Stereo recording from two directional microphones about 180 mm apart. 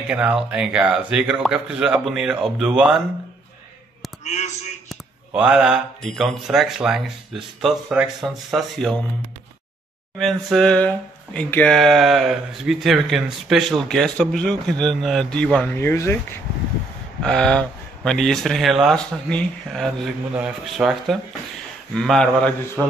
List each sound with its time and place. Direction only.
0.1 s speech: 5° right (ahead or behind)
4.2 s a man's voice: 40° left (ahead or behind)
4.8 s speech: 5° right (ahead or behind)
10.1 s speech: centre (ahead or behind)
17.2 s speech: 5° left (ahead or behind)